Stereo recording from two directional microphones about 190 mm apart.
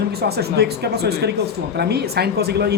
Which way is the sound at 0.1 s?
55° right (ahead or behind).